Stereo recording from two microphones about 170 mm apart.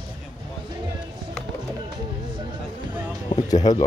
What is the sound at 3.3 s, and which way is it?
Music, 30° left (ahead or behind).